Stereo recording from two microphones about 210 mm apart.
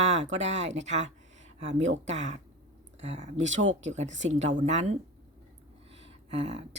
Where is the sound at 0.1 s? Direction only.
35° right (ahead or behind).